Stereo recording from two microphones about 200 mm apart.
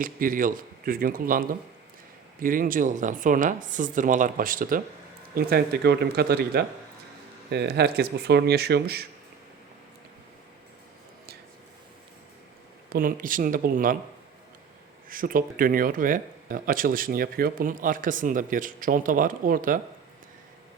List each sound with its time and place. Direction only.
0.0 s speech: 45° right (ahead or behind)
12.9 s speech: 45° right (ahead or behind)
15.1 s speech: 45° right (ahead or behind)